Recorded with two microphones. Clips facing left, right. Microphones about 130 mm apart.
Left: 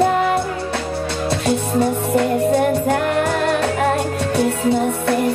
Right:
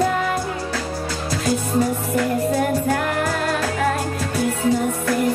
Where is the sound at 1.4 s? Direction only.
30° left (ahead or behind).